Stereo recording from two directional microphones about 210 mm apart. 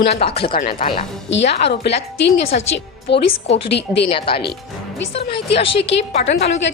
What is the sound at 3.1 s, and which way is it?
Speech, 55° left (ahead or behind).